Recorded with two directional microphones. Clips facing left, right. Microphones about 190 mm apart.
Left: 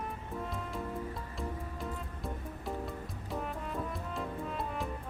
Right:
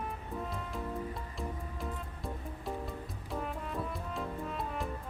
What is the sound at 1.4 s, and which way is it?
Music, centre (ahead or behind).